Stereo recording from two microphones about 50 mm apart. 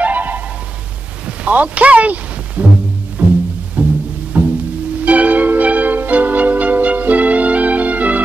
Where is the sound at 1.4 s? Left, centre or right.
Right.